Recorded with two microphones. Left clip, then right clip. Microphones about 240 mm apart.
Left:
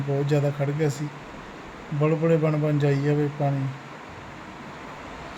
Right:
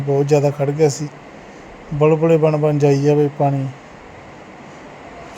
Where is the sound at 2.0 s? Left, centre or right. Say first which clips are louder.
Right 9 dB; centre.